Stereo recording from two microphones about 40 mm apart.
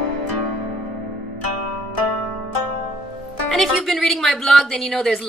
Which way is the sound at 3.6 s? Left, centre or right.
Centre.